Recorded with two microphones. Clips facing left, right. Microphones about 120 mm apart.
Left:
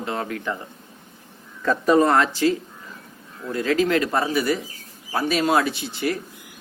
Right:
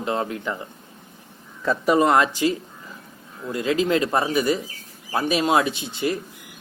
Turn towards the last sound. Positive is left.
turn(degrees=-20)  # may be behind; listen again after turning